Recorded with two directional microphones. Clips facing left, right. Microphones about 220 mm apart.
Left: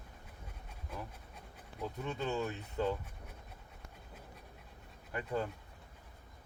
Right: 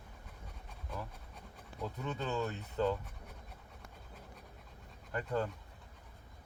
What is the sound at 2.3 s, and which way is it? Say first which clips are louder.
Speech: even; 15° left (ahead or behind).